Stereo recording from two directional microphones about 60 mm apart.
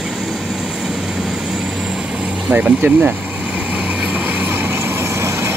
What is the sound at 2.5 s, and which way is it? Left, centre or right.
Speech, right.